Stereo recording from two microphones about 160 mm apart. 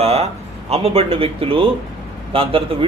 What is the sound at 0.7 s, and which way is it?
A man's voice, 40° right (ahead or behind).